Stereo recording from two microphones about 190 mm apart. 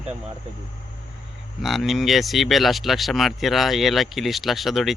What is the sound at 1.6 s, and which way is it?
Speech, centre (ahead or behind).